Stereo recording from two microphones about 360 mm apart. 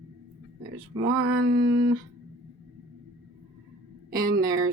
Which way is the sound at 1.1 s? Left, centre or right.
Right.